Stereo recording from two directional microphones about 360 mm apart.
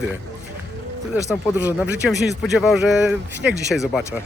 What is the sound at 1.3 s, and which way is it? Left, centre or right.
A man's voice, centre.